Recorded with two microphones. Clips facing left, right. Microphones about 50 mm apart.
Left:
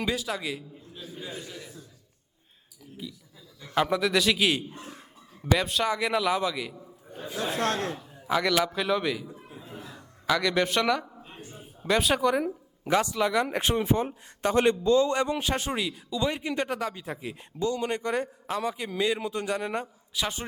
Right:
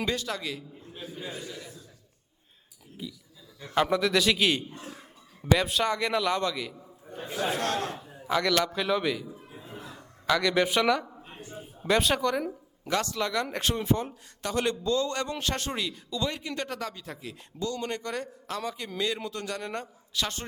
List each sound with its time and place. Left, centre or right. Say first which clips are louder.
0.0 s speech: left 1 dB; centre
3.0 s a man's voice: right 1 dB; centre
7.2 s speech: right 1 dB; right
7.6 s speech: left 2 dB; left
8.3 s a man's voice: left 1 dB; centre